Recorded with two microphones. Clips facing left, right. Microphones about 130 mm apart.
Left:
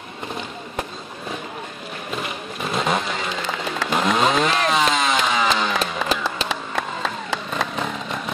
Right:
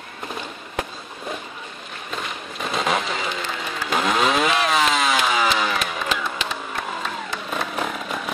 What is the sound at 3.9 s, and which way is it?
Chainsaw, centre (ahead or behind).